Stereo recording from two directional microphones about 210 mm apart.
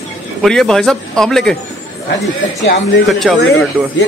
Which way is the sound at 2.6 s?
55° left (ahead or behind).